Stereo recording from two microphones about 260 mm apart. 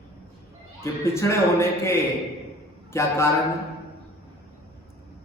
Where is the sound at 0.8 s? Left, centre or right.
Centre.